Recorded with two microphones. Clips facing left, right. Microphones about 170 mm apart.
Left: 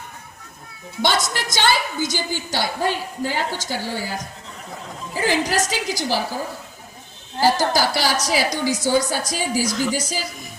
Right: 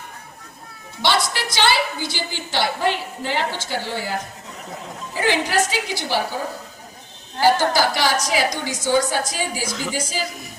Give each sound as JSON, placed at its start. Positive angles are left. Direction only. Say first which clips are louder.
{"t": 1.0, "sound": "a woman's voice", "louder": "right 1 dB", "side_deg": 45}
{"t": 5.1, "sound": "a woman's voice", "louder": "right 1 dB", "side_deg": 40}
{"t": 7.4, "sound": "a woman's voice", "louder": "right 1 dB", "side_deg": 40}
{"t": 9.6, "sound": "speech", "louder": "left 5 dB", "side_deg": 0}